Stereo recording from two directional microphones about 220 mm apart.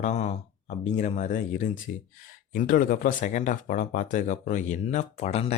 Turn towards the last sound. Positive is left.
turn(degrees=30)  # may be behind; listen again after turning